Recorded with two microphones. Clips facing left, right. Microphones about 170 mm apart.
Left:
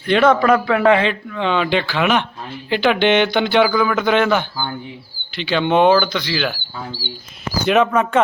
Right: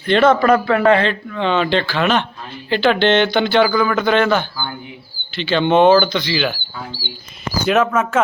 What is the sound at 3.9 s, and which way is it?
Speech, 15° left (ahead or behind).